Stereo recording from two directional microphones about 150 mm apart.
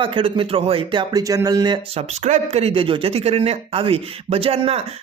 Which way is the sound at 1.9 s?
50° right (ahead or behind).